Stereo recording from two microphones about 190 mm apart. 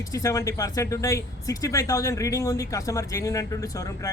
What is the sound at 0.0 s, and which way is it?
Speech, 15° left (ahead or behind).